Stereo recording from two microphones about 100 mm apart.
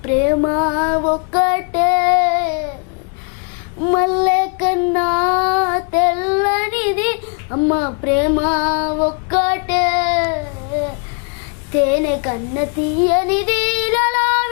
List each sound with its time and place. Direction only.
0.2 s music: 20° left (ahead or behind)
1.3 s child singing: 15° left (ahead or behind)
3.9 s child singing: 15° left (ahead or behind)
7.5 s child singing: 20° left (ahead or behind)
11.8 s a child's voice: 15° left (ahead or behind)
13.1 s child singing: 10° left (ahead or behind)